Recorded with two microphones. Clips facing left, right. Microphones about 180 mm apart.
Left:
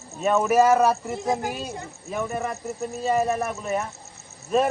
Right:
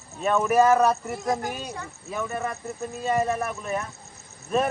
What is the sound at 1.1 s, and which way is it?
Speech, 25° left (ahead or behind).